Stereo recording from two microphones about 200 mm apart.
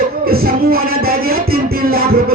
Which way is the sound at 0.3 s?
50° right (ahead or behind).